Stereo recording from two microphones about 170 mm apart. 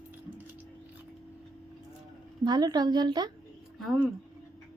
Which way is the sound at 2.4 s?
25° right (ahead or behind).